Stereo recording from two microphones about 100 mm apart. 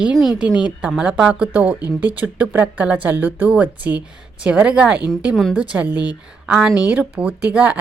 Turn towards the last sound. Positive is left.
turn(degrees=-15)  # may be behind; listen again after turning